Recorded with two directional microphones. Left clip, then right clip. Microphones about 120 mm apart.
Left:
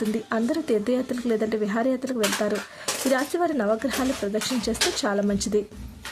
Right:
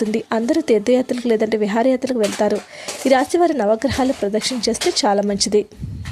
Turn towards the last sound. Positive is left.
turn(degrees=-40)  # may be behind; listen again after turning